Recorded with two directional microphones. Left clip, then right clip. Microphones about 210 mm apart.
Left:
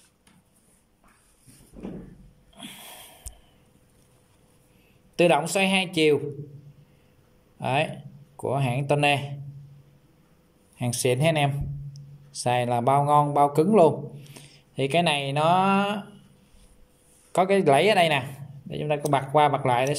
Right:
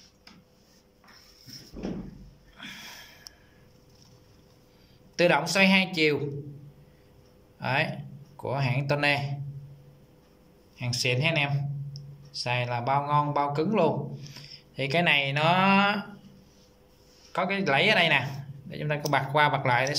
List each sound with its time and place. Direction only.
2.5 s a sound: 20° left (ahead or behind)
5.1 s speech: 15° left (ahead or behind)
7.6 s speech: 15° left (ahead or behind)
10.8 s a man's voice: 25° left (ahead or behind)
17.3 s a man's voice: 25° left (ahead or behind)